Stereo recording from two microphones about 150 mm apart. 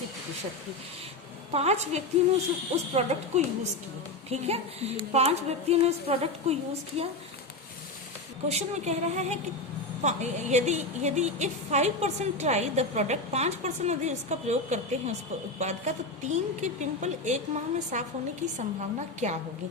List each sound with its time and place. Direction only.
1.5 s a woman's voice: 45° right (ahead or behind)
8.4 s a woman's voice: 45° right (ahead or behind)